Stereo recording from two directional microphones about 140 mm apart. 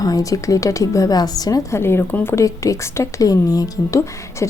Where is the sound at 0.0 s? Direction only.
25° left (ahead or behind).